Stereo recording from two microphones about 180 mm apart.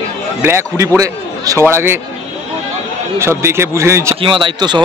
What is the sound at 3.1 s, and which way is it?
Speech, 15° right (ahead or behind).